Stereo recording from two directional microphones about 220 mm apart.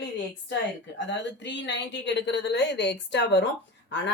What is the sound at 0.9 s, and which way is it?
Speech, 55° left (ahead or behind).